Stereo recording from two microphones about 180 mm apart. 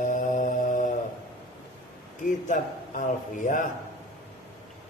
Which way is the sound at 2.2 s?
45° left (ahead or behind).